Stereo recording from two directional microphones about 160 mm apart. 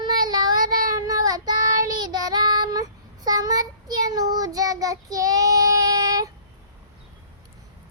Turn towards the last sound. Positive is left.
turn(degrees=-25)  # may be behind; listen again after turning